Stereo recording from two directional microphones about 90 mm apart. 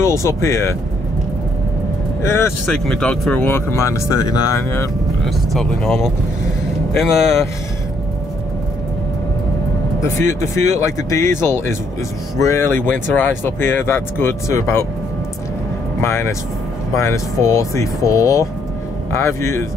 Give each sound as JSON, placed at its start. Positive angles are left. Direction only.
{"t": 0.0, "sound": "speech", "side_deg": 35}
{"t": 2.2, "sound": "speech", "side_deg": 30}
{"t": 2.6, "sound": "speech", "side_deg": 5}
{"t": 3.5, "sound": "speech", "side_deg": 30}
{"t": 5.2, "sound": "speech", "side_deg": 5}
{"t": 7.0, "sound": "speech", "side_deg": 0}
{"t": 10.0, "sound": "speech", "side_deg": 30}
{"t": 16.0, "sound": "speech", "side_deg": 30}